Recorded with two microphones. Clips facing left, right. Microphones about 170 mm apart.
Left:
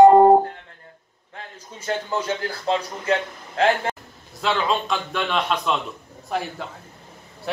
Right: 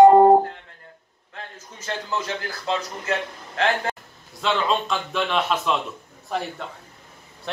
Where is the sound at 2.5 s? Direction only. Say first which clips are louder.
Left 3 dB; 30° left (ahead or behind).